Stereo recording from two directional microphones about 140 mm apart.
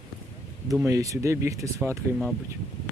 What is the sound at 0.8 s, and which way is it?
Speech, 25° right (ahead or behind).